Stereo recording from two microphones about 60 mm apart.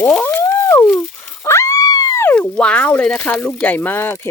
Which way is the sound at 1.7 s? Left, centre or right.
Left.